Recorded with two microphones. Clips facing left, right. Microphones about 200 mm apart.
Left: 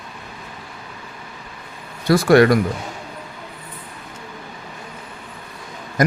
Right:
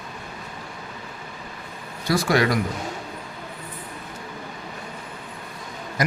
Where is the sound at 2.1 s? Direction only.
55° left (ahead or behind).